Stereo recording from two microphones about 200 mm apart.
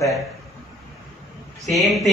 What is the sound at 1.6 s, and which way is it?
Speech, centre (ahead or behind).